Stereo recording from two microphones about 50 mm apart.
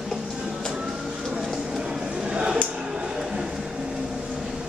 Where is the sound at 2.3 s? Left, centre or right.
Centre.